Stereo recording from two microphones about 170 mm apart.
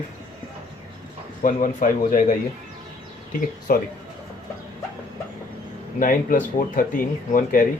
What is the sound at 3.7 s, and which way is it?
Speech, 55° left (ahead or behind).